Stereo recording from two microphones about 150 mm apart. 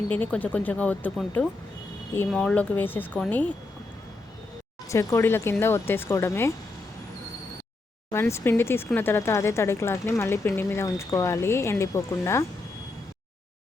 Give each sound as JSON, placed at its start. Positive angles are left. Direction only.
{"t": 0.1, "sound": "speech", "side_deg": 10}
{"t": 2.3, "sound": "speech", "side_deg": 5}
{"t": 4.9, "sound": "speech", "side_deg": 20}
{"t": 8.1, "sound": "speech", "side_deg": 15}